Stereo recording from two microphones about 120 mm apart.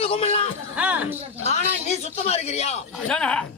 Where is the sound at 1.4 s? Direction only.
65° left (ahead or behind).